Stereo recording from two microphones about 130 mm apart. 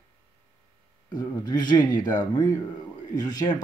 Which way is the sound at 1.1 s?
30° left (ahead or behind).